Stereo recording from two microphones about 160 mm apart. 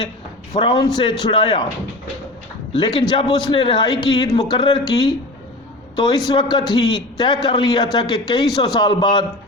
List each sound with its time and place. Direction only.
0.5 s a man's voice: 25° left (ahead or behind)
2.7 s a man's voice: 30° left (ahead or behind)